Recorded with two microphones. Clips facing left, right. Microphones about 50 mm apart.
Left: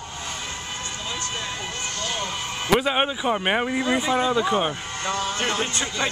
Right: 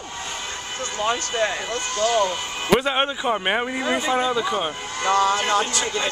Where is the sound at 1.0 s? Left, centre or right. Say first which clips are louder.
Right 11 dB; right.